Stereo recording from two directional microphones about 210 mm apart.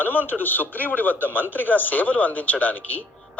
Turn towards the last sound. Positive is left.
turn(degrees=10)  # may be behind; listen again after turning